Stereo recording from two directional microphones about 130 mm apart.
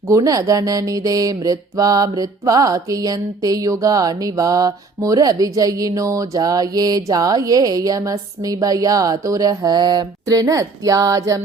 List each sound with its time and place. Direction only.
0.1 s speech: 25° right (ahead or behind)